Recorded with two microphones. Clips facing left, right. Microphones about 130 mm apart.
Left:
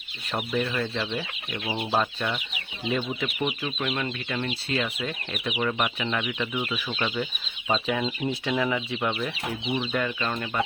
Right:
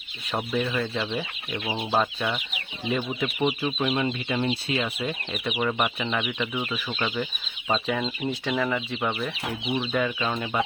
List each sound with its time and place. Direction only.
0.5 s speech: centre (ahead or behind)
3.3 s speech: 15° right (ahead or behind)